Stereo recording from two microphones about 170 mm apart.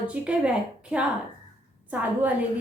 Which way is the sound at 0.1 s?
5° right (ahead or behind).